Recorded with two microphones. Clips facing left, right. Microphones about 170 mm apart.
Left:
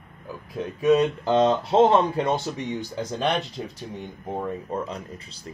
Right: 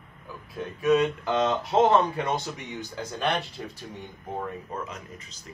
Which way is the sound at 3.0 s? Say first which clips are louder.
Left 2 dB; 15° left (ahead or behind).